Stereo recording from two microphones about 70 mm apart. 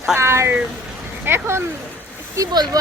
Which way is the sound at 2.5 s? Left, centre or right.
Right.